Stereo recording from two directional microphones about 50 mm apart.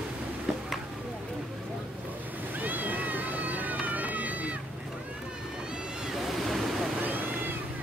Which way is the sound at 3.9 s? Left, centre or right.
Right.